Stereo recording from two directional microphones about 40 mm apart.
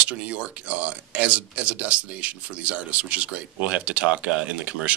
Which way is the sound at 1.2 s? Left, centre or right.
Right.